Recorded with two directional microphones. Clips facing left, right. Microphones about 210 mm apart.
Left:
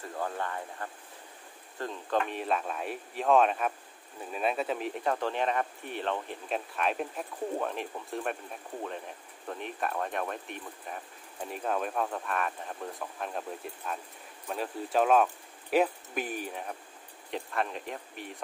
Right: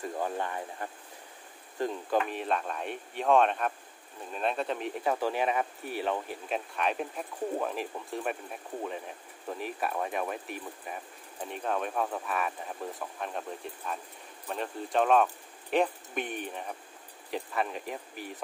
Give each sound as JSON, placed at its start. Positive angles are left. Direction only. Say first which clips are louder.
{"t": 0.0, "sound": "speech", "louder": "right 2 dB", "side_deg": -15}